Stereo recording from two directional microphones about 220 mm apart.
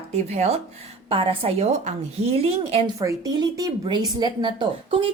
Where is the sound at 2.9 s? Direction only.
15° right (ahead or behind).